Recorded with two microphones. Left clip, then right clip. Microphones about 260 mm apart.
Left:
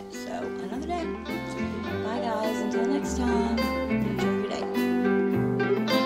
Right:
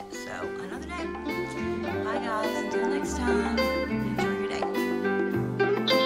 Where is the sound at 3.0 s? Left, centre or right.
Left.